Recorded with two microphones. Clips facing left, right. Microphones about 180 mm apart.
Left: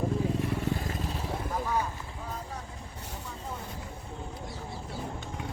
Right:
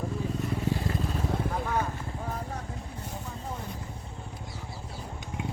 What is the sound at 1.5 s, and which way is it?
Vehicle, 50° right (ahead or behind).